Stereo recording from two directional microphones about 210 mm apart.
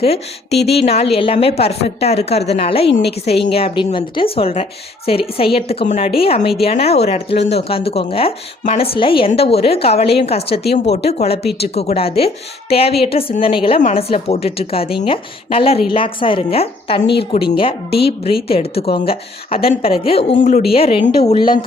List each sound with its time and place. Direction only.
0.0 s a woman's voice: 30° left (ahead or behind)
10.6 s a woman's voice: 50° left (ahead or behind)
10.9 s a woman's voice: 30° left (ahead or behind)
20.4 s a woman's voice: 45° left (ahead or behind)
20.7 s a woman's voice: 25° left (ahead or behind)